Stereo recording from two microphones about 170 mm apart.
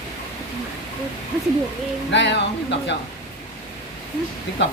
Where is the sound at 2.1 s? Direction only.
90° left.